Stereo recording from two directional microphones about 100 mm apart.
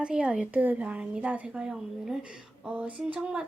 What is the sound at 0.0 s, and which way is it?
A woman's voice, 10° right (ahead or behind).